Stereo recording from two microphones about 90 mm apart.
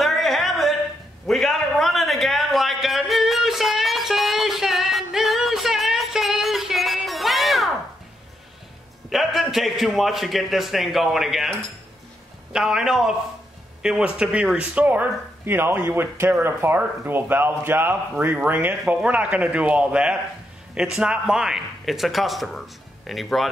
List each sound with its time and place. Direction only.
0.0 s a sound: centre (ahead or behind)
9.1 s a man's voice: centre (ahead or behind)
12.5 s a man's voice: 5° right (ahead or behind)